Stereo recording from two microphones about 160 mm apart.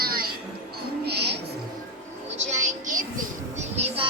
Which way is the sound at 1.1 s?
90° right.